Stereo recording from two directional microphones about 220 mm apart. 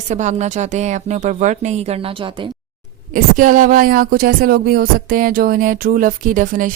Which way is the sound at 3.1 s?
35° right (ahead or behind).